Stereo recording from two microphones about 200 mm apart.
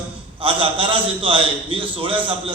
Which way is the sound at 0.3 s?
25° right (ahead or behind).